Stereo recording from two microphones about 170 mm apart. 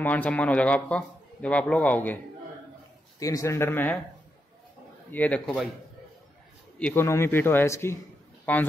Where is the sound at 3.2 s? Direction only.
20° left (ahead or behind).